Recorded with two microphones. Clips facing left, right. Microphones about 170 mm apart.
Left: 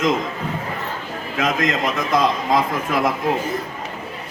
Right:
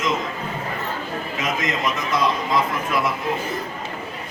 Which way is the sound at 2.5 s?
90° left.